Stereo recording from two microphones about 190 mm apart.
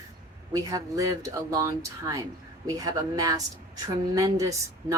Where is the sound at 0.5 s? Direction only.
15° right (ahead or behind).